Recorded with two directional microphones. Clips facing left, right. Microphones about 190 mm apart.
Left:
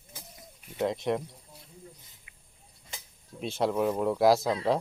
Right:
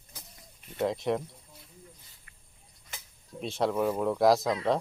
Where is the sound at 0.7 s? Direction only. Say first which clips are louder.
Even; centre (ahead or behind).